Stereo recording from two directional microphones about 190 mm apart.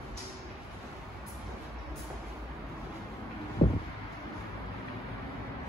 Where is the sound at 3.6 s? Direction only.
35° left (ahead or behind).